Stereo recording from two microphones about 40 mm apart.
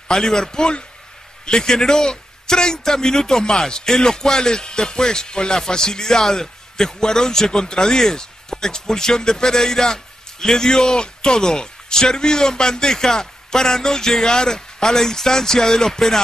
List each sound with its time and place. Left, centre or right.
0.1 s a man's voice: centre